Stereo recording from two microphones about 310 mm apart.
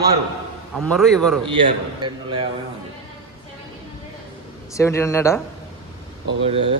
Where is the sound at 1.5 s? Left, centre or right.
Centre.